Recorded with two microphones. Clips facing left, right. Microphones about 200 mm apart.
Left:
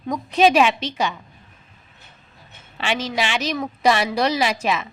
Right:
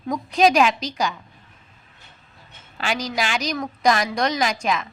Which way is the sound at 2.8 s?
Centre (ahead or behind).